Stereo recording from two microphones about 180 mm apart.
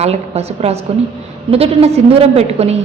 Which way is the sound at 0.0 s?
35° right (ahead or behind).